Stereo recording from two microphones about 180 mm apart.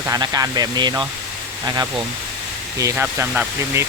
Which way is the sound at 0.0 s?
20° right (ahead or behind).